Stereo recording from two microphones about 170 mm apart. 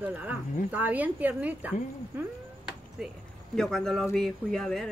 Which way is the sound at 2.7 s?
Centre (ahead or behind).